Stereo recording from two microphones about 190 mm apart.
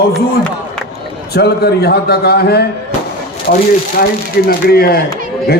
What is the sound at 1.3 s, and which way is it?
A man's voice, 55° left (ahead or behind).